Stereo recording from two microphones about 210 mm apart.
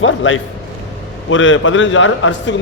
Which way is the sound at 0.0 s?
65° left (ahead or behind).